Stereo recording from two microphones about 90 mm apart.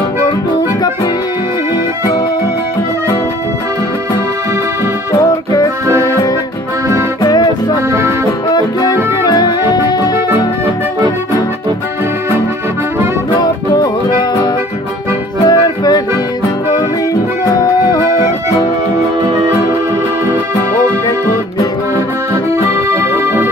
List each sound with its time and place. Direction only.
5.2 s music: 45° left (ahead or behind)
9.3 s music: 50° left (ahead or behind)
15.4 s music: 50° left (ahead or behind)
17.5 s music: 40° left (ahead or behind)
19.2 s music: 55° right (ahead or behind)
22.8 s music: 25° right (ahead or behind)